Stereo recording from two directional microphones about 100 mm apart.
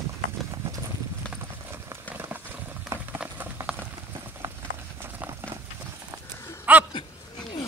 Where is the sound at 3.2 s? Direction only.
15° right (ahead or behind).